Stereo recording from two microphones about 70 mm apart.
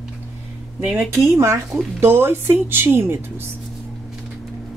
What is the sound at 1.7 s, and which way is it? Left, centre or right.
Speech, right.